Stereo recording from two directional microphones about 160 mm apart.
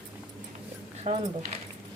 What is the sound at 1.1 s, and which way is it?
Speech, 45° right (ahead or behind).